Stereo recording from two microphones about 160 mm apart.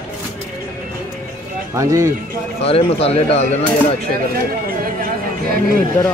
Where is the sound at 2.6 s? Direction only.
35° left (ahead or behind).